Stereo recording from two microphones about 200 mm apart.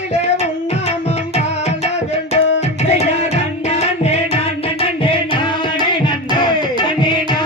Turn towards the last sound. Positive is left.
turn(degrees=20)  # may be behind; listen again after turning